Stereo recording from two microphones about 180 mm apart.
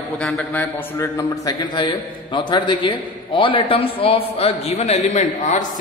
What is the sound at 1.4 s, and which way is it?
A man's voice, 25° left (ahead or behind).